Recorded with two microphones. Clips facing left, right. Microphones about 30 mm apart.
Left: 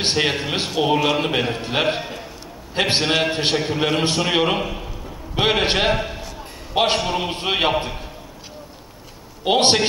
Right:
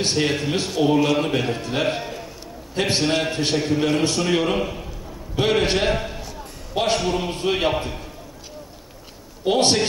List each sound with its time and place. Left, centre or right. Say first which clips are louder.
0.0 s a man's voice: left 1 dB; left
5.3 s a man's voice: left 1 dB; left
9.4 s a man's voice: left 2 dB; left